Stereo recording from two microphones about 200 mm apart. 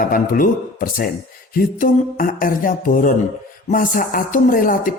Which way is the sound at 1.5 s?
45° left (ahead or behind).